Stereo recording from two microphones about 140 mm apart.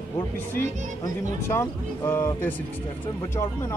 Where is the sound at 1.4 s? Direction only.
20° left (ahead or behind).